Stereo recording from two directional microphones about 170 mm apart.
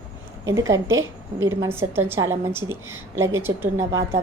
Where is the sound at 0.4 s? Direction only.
20° right (ahead or behind).